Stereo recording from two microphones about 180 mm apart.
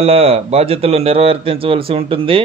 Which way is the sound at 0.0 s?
35° right (ahead or behind).